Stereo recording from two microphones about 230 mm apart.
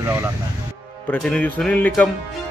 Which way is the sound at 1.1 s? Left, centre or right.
Centre.